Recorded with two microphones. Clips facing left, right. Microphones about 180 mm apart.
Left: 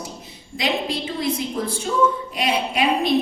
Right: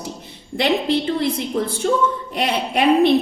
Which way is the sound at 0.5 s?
60° right (ahead or behind).